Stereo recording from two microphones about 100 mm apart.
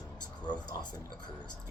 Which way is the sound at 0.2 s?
45° left (ahead or behind).